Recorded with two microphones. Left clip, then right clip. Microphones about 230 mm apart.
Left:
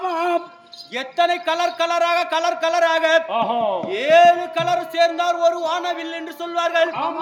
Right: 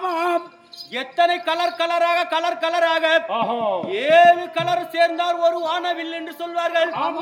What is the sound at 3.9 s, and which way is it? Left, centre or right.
A man's voice, centre.